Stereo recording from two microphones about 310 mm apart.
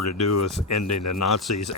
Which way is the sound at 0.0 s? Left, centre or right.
Left.